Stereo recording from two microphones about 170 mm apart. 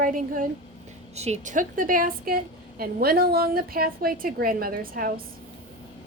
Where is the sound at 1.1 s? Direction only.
40° right (ahead or behind).